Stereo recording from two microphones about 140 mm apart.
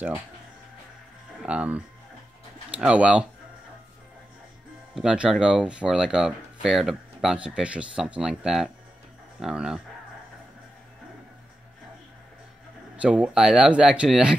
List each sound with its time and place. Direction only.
1.4 s speech: 10° right (ahead or behind)
4.9 s speech: 5° right (ahead or behind)
12.9 s speech: 10° right (ahead or behind)